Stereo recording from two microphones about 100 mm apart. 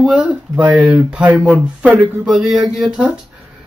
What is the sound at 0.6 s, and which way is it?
Speech, 15° right (ahead or behind).